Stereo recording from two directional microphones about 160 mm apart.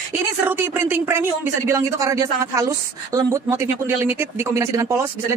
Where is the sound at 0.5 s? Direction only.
15° right (ahead or behind).